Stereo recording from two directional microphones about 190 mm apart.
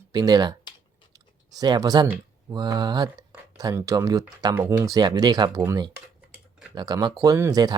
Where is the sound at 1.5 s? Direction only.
20° right (ahead or behind).